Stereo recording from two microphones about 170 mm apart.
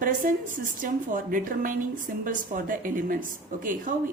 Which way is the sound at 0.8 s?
55° right (ahead or behind).